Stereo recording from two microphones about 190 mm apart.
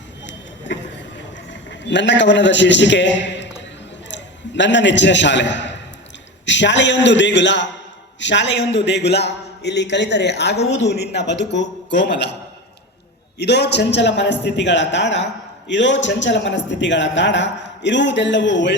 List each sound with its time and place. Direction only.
0.3 s a sound: 70° left (ahead or behind)
1.8 s a man's voice: 70° left (ahead or behind)
13.4 s a man's voice: 60° left (ahead or behind)